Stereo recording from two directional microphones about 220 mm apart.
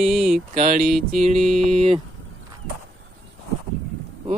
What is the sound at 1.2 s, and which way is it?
Speech, 30° right (ahead or behind).